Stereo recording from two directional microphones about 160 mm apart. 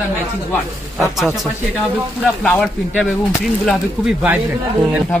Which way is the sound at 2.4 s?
5° left (ahead or behind).